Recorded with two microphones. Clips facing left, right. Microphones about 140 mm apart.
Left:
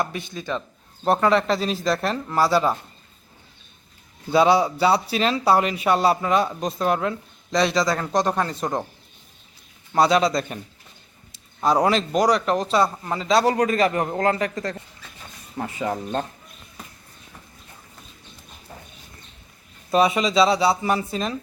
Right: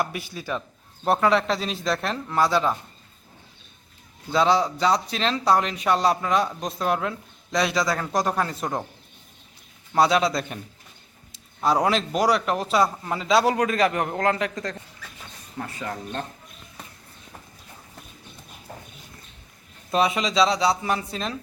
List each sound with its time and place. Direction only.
0.0 s speech: 10° right (ahead or behind)
4.3 s speech: 10° left (ahead or behind)
9.9 s speech: centre (ahead or behind)
15.5 s speech: 20° left (ahead or behind)
19.9 s speech: centre (ahead or behind)